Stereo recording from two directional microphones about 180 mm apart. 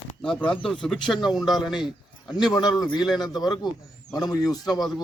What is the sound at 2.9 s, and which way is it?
Speech, centre (ahead or behind).